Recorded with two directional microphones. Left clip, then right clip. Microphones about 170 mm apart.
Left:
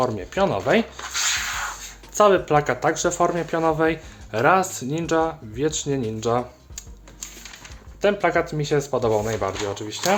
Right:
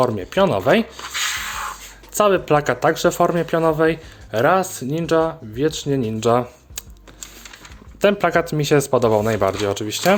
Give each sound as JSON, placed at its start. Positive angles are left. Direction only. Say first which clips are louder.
{"t": 0.0, "sound": "speech", "louder": "right 4 dB", "side_deg": -35}
{"t": 2.1, "sound": "speech", "louder": "right 1 dB", "side_deg": -30}
{"t": 6.1, "sound": "speech", "louder": "right 8 dB", "side_deg": -40}
{"t": 8.0, "sound": "speech", "louder": "right 3 dB", "side_deg": -45}